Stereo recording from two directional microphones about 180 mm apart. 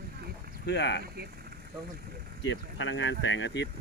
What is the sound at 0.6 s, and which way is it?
Speech, 70° left (ahead or behind).